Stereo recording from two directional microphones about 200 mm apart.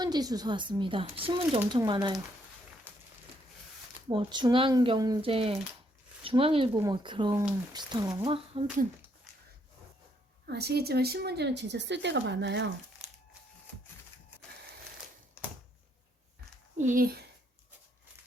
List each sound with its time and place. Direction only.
0.0 s speech: 20° right (ahead or behind)
4.1 s speech: 25° right (ahead or behind)
10.4 s a woman's voice: 55° right (ahead or behind)
16.7 s a child's voice: 40° right (ahead or behind)